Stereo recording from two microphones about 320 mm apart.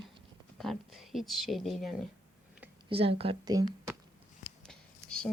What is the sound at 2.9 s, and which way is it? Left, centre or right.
Speech, centre.